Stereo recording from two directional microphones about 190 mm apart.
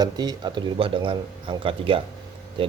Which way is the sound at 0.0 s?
20° right (ahead or behind).